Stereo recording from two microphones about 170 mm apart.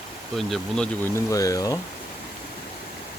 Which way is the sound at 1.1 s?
20° left (ahead or behind).